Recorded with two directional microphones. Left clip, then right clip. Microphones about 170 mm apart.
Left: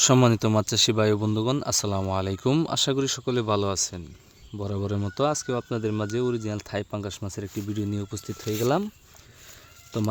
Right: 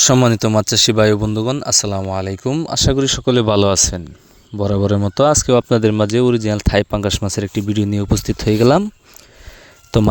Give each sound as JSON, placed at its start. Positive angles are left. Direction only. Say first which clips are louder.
{"t": 0.0, "sound": "speech", "louder": "right 7 dB", "side_deg": -30}
{"t": 2.6, "sound": "speech", "louder": "right 8 dB", "side_deg": -25}
{"t": 5.9, "sound": "speech", "louder": "right 12 dB", "side_deg": -50}
{"t": 9.9, "sound": "speech", "louder": "right 14 dB", "side_deg": -70}